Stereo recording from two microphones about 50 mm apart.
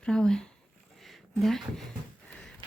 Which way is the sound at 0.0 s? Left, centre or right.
Centre.